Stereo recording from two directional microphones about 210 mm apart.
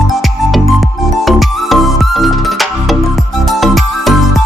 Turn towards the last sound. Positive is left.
turn(degrees=0)  # may be behind; listen again after turning